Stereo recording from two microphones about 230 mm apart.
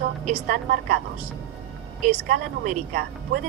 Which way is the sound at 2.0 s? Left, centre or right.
Right.